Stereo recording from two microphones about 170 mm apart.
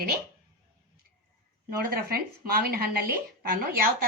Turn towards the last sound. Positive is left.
turn(degrees=-60)  # may be behind; listen again after turning